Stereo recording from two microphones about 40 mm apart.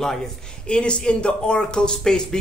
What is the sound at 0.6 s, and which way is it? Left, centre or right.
Speech, left.